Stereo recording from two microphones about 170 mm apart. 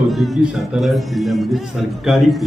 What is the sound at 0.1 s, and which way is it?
A man's voice, centre (ahead or behind).